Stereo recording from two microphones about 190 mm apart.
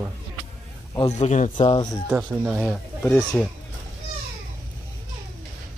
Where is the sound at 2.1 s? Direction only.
10° right (ahead or behind).